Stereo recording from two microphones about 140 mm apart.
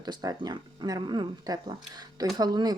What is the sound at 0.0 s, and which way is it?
Speech, 30° right (ahead or behind).